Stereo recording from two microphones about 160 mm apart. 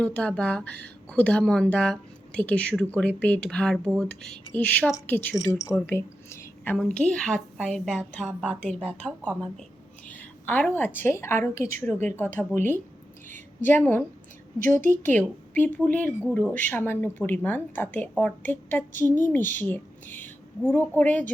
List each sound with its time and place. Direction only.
0.0 s a woman's voice: 5° left (ahead or behind)
13.6 s a woman's voice: 10° left (ahead or behind)